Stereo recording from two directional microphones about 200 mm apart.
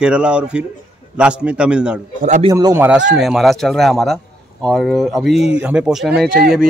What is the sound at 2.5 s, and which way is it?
Speech, 20° right (ahead or behind).